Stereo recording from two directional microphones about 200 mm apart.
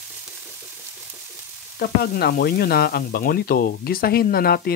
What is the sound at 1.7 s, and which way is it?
Speech, 50° left (ahead or behind).